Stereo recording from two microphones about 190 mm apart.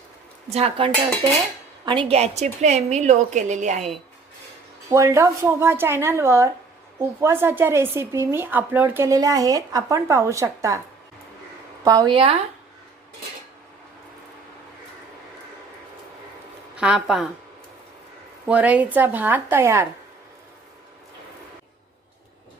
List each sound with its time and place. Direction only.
0.5 s a woman's voice: 35° right (ahead or behind)
4.9 s speech: 15° right (ahead or behind)
11.9 s speech: 20° right (ahead or behind)
16.7 s a woman's voice: 5° right (ahead or behind)
18.4 s speech: 5° right (ahead or behind)